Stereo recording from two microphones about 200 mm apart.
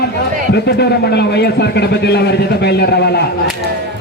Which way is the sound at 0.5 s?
55° left (ahead or behind).